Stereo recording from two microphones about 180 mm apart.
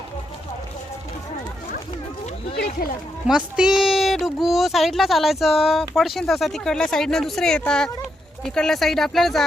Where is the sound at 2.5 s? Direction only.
60° left (ahead or behind).